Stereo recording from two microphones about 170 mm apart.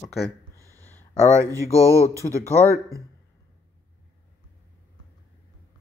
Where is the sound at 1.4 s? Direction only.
20° right (ahead or behind).